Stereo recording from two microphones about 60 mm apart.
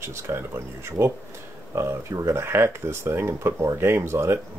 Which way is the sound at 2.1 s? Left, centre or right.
Right.